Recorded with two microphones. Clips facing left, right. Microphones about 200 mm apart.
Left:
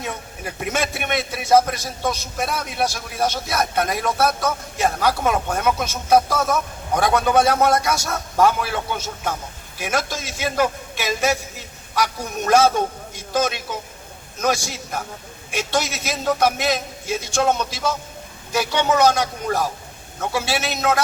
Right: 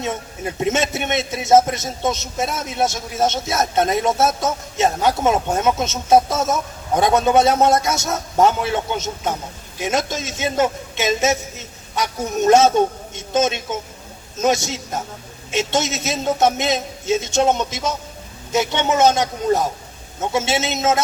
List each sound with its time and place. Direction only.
0.0 s a man's voice: 25° right (ahead or behind)